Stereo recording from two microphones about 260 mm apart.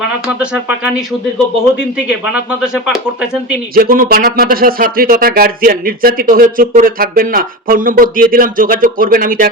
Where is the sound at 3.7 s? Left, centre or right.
Right.